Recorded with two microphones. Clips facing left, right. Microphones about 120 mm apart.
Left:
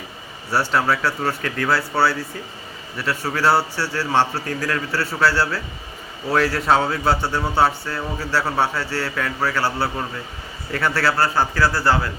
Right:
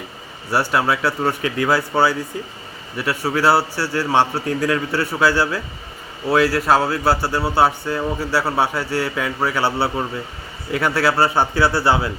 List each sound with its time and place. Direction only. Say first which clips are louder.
0.5 s speech: right 1 dB; 10° right (ahead or behind)
9.6 s a man's voice: right 3 dB; 25° right (ahead or behind)
10.7 s a man's voice: right 2 dB; 15° right (ahead or behind)